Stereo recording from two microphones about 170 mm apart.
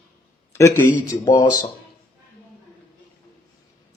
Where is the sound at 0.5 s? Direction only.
15° left (ahead or behind).